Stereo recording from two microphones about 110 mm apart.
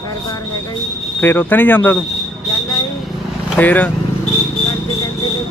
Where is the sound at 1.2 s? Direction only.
15° left (ahead or behind).